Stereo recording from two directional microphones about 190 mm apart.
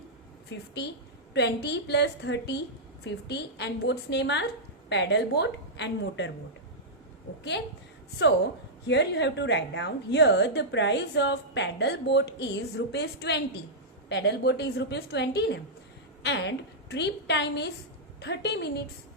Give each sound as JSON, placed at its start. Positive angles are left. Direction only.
{"t": 0.5, "sound": "a woman's voice", "side_deg": 65}
{"t": 8.9, "sound": "a woman's voice", "side_deg": 65}